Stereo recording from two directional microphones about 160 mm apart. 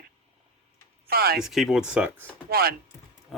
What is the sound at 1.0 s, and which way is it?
Speech, 75° right (ahead or behind).